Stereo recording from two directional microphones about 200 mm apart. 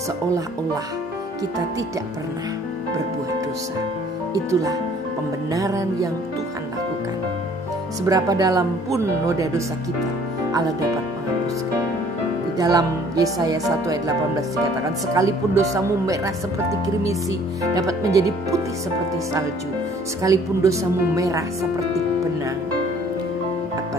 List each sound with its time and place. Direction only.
4.3 s speech: 15° right (ahead or behind)
8.1 s speech: 20° right (ahead or behind)
12.5 s music: 20° right (ahead or behind)
15.1 s speech: 15° right (ahead or behind)
17.7 s speech: 15° right (ahead or behind)
20.2 s speech: 15° right (ahead or behind)